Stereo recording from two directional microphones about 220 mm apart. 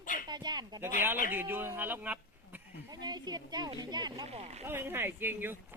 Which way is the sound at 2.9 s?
20° right (ahead or behind).